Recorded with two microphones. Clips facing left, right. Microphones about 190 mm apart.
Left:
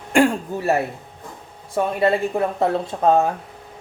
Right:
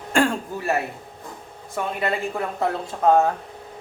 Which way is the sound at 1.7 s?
30° left (ahead or behind).